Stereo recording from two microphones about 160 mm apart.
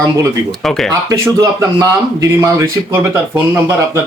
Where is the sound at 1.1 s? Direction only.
25° right (ahead or behind).